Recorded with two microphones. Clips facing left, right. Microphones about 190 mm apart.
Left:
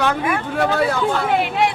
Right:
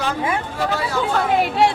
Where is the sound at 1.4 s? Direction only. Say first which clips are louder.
Right 2 dB; 40° right (ahead or behind).